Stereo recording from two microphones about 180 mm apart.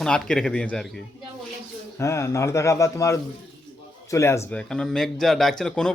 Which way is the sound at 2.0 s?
15° left (ahead or behind).